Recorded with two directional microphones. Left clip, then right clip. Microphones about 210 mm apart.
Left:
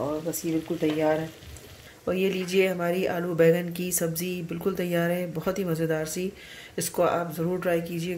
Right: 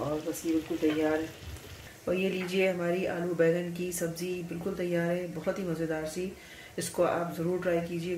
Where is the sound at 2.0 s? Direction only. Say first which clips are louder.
Left 4 dB; 30° left (ahead or behind).